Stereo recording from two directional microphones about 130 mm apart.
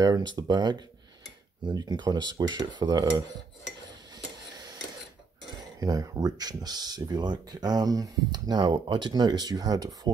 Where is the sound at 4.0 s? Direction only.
35° right (ahead or behind).